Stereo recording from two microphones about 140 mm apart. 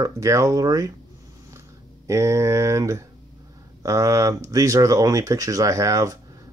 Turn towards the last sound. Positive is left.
turn(degrees=-25)  # may be behind; listen again after turning